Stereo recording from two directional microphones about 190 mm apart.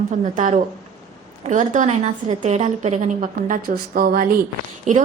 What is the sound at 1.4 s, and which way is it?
A woman's voice, 40° right (ahead or behind).